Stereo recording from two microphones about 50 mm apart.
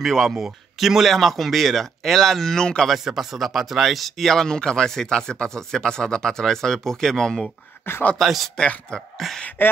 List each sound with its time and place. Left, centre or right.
0.0 s speech: centre
0.3 s speech: centre
2.9 s speech: centre
7.8 s speech: left
8.2 s speech: centre
8.5 s speech: centre
9.6 s speech: left